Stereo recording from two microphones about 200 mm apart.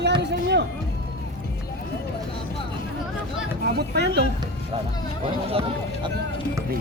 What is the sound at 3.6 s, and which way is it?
Speech, 55° right (ahead or behind).